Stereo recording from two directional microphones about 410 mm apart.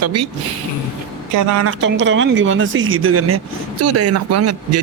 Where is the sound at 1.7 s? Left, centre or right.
Right.